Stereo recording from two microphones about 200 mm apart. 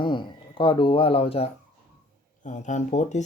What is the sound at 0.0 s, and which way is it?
Speech, 25° left (ahead or behind).